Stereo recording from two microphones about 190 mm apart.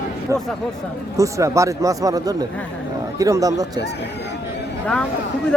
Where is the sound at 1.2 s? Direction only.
15° right (ahead or behind).